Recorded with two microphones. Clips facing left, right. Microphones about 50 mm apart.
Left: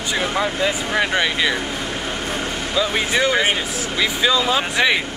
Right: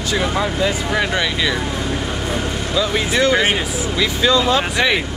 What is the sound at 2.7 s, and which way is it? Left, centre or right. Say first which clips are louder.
Speech: right 1 dB; centre.